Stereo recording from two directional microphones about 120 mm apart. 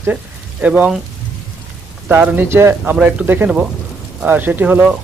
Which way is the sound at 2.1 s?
15° right (ahead or behind).